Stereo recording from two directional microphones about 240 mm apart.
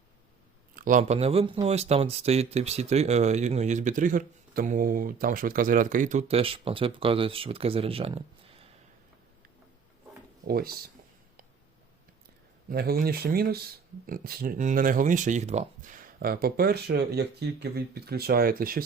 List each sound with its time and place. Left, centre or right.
0.8 s speech: right
10.4 s speech: right
12.7 s speech: right